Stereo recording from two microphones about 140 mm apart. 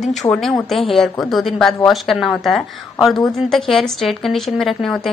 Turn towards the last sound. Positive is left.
turn(degrees=5)  # may be behind; listen again after turning